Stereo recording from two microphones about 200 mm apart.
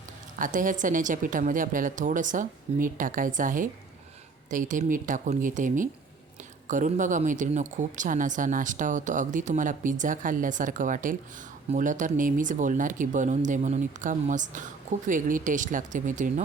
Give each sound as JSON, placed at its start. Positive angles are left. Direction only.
{"t": 0.3, "sound": "speech", "side_deg": -40}